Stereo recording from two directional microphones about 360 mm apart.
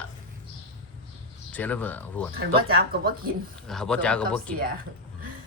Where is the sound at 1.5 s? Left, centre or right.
Centre.